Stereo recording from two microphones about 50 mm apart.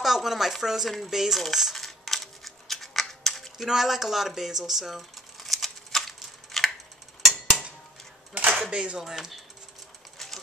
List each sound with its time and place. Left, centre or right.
0.0 s speech: centre
0.9 s cutlery: centre
3.6 s speech: centre
6.5 s a sound: centre
8.5 s speech: centre
9.1 s speech: centre
10.1 s sewing machine: centre